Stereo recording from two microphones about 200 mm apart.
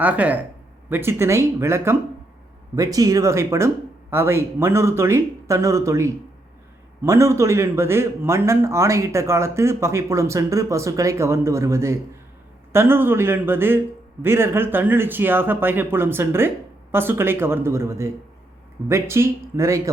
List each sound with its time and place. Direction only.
0.0 s a man's voice: 5° right (ahead or behind)